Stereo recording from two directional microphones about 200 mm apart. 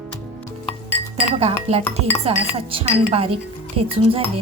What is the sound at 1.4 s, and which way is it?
A woman's voice, 30° right (ahead or behind).